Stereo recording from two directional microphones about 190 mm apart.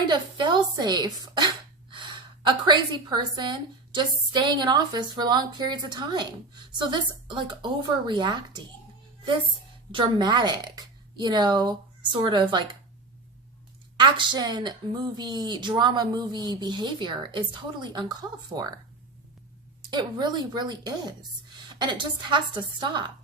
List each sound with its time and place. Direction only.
0.1 s speech: 25° right (ahead or behind)
2.5 s speech: 25° right (ahead or behind)
9.9 s speech: 25° right (ahead or behind)
13.9 s speech: 25° right (ahead or behind)
19.8 s speech: 20° right (ahead or behind)